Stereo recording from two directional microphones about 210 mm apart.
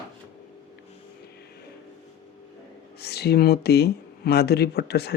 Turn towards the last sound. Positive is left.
turn(degrees=50)  # may be behind; listen again after turning